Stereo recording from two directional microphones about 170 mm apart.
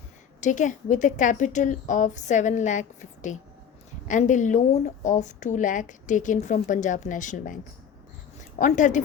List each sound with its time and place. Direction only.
0.4 s a woman's voice: 45° left (ahead or behind)